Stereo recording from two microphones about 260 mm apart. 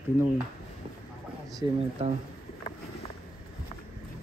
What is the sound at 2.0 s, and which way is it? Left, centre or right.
Speech, right.